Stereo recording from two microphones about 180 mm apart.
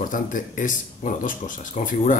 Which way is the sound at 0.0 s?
50° left (ahead or behind).